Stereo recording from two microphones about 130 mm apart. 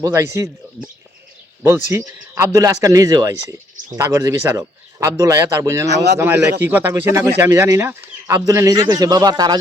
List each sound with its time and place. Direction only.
0.0 s a man's voice: 20° right (ahead or behind)
1.6 s a man's voice: 20° right (ahead or behind)